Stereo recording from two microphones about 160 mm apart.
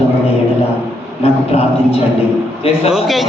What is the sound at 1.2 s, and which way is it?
Speech, 40° left (ahead or behind).